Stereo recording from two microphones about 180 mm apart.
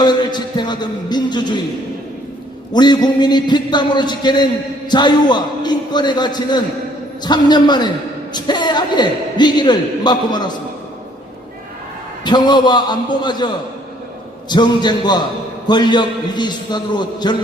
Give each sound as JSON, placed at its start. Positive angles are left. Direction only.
{"t": 0.0, "sound": "a sound", "side_deg": 25}
{"t": 2.7, "sound": "a man's voice", "side_deg": 25}
{"t": 12.2, "sound": "a man's voice", "side_deg": 25}
{"t": 14.5, "sound": "a man's voice", "side_deg": 25}